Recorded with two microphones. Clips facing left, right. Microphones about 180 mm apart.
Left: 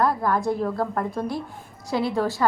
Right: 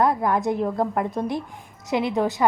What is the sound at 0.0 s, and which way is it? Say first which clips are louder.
A woman's voice: right 1 dB; 20° right (ahead or behind).